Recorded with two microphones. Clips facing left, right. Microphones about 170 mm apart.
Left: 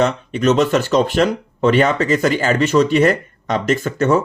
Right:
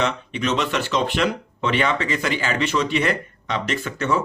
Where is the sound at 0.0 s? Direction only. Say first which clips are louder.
Left 7 dB; 40° left (ahead or behind).